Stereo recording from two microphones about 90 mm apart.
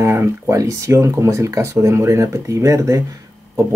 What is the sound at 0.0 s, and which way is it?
Speech, 35° right (ahead or behind).